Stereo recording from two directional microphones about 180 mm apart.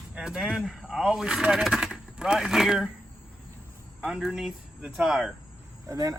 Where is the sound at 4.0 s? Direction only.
5° right (ahead or behind).